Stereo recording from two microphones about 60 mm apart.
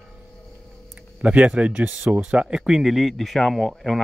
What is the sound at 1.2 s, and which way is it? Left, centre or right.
Speech, right.